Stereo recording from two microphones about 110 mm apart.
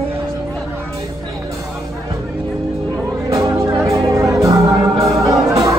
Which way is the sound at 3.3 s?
30° right (ahead or behind).